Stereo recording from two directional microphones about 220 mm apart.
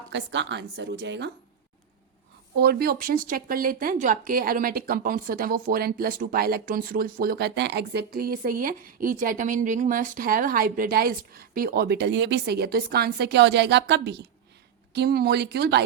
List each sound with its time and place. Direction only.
0.1 s a woman's voice: 55° right (ahead or behind)
2.6 s a woman's voice: 45° right (ahead or behind)